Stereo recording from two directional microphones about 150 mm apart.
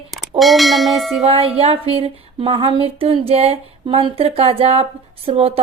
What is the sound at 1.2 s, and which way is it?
A woman's voice, 40° right (ahead or behind).